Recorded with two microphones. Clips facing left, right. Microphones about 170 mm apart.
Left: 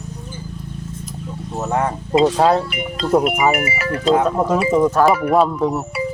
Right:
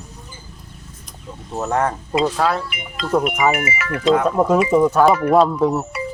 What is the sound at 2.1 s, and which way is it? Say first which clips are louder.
Speech: left 7 dB; 25° left (ahead or behind).